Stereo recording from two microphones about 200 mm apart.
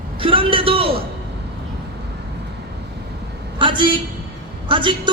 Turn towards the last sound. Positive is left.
turn(degrees=-25)  # may be behind; listen again after turning